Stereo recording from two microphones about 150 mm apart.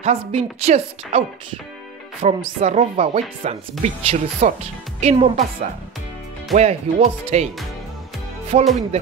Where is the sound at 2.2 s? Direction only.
55° right (ahead or behind).